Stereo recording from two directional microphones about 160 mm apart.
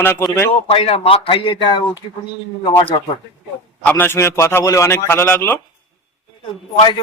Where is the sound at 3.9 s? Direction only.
15° left (ahead or behind).